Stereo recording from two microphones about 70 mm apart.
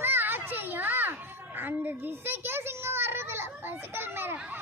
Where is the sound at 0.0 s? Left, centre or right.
Right.